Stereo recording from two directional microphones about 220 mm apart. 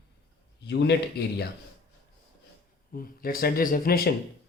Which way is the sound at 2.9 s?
40° left (ahead or behind).